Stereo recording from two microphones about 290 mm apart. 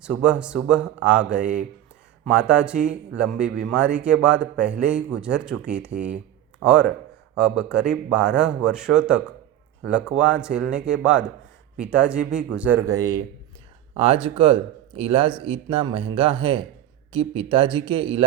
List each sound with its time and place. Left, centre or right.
0.0 s speech: centre
7.3 s speech: centre